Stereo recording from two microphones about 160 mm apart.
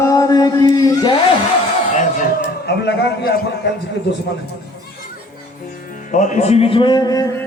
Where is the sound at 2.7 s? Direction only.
90° left.